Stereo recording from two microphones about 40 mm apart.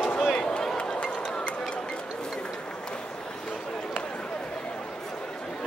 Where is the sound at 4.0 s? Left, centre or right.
Left.